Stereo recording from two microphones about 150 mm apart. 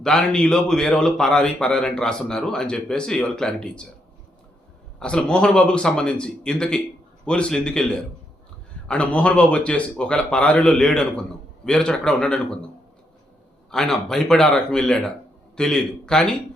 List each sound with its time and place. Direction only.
0.0 s speech: 5° left (ahead or behind)
4.9 s speech: 5° left (ahead or behind)
13.7 s speech: 5° left (ahead or behind)